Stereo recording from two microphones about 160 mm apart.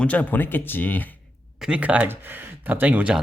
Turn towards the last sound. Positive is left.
turn(degrees=-10)  # may be behind; listen again after turning